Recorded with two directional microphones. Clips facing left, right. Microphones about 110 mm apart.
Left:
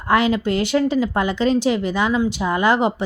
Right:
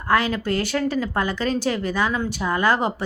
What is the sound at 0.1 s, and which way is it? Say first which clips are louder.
Speech: left 3 dB; 20° left (ahead or behind).